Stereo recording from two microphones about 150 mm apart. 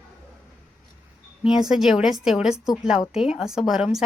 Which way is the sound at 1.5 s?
5° right (ahead or behind).